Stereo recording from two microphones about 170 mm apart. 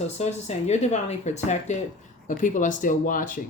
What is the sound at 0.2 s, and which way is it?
Speech, 40° left (ahead or behind).